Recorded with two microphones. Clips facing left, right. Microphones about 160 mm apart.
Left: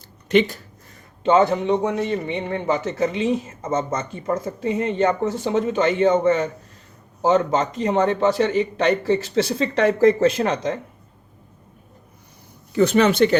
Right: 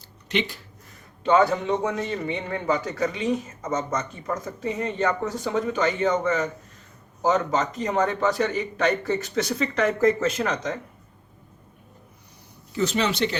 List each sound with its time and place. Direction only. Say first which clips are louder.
0.3 s speech: left 9 dB; 45° left (ahead or behind)
1.2 s a man's voice: left 3 dB; 25° left (ahead or behind)
12.7 s speech: left 8 dB; 55° left (ahead or behind)